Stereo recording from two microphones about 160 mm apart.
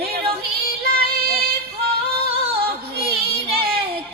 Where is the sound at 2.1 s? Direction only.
40° right (ahead or behind).